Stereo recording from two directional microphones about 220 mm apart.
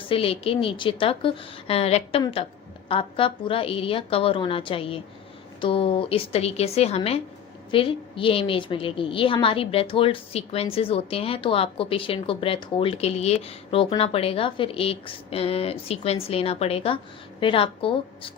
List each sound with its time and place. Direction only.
0.1 s a woman's voice: 25° left (ahead or behind)